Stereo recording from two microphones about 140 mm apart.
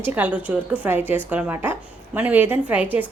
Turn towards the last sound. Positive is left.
turn(degrees=-10)  # may be behind; listen again after turning